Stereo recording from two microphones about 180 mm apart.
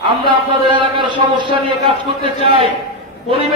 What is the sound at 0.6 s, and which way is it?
A man's voice, 25° right (ahead or behind).